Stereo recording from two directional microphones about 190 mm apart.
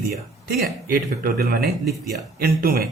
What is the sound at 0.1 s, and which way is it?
A man's voice, 50° right (ahead or behind).